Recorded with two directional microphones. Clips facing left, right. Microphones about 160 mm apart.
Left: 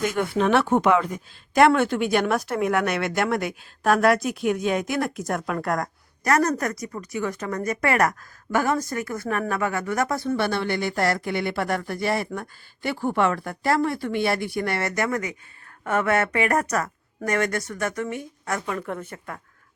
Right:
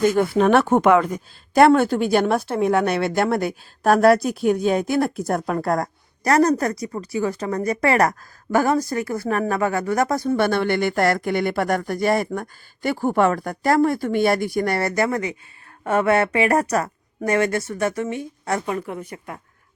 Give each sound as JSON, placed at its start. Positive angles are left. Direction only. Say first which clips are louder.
{"t": 0.0, "sound": "a woman's voice", "louder": "right 6 dB", "side_deg": -35}
{"t": 18.9, "sound": "speech", "louder": "right 1 dB", "side_deg": -10}